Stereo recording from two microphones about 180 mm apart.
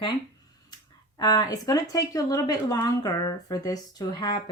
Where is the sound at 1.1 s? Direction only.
20° left (ahead or behind).